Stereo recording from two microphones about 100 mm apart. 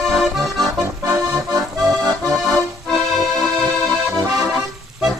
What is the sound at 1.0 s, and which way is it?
Accordion, 35° right (ahead or behind).